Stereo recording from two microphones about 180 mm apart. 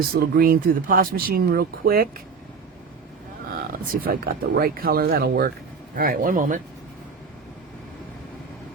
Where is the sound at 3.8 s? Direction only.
55° right (ahead or behind).